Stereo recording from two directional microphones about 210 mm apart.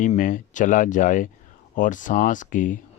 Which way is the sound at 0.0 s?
40° left (ahead or behind).